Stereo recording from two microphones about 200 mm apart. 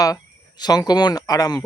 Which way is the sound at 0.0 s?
20° left (ahead or behind).